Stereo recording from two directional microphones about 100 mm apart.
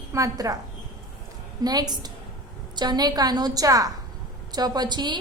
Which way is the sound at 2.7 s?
45° right (ahead or behind).